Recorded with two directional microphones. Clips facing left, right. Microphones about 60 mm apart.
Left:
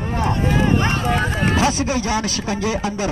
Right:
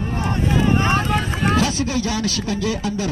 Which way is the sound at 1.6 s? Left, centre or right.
Left.